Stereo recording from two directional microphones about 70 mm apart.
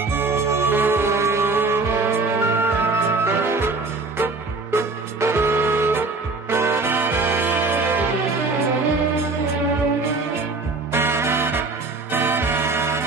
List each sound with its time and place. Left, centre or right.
0.1 s music: right
10.9 s music: right